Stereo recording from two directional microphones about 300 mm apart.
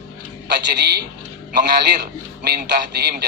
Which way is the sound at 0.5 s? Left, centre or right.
Right.